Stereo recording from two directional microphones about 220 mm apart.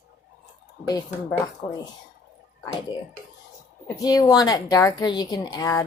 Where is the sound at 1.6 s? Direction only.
25° left (ahead or behind).